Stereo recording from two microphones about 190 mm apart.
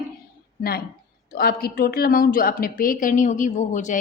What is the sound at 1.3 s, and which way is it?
A woman's voice, 50° left (ahead or behind).